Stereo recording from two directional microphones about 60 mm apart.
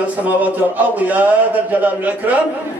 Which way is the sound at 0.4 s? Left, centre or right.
Right.